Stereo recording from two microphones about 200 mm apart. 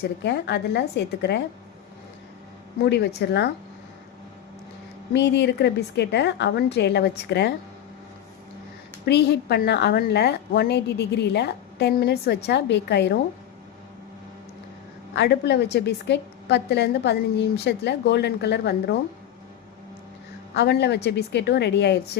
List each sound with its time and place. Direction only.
0.0 s a woman's voice: 55° left (ahead or behind)
2.8 s a woman's voice: 55° left (ahead or behind)
5.1 s a woman's voice: 60° left (ahead or behind)
9.0 s a woman's voice: 55° left (ahead or behind)
15.1 s a woman's voice: 60° left (ahead or behind)
20.6 s a woman's voice: 55° left (ahead or behind)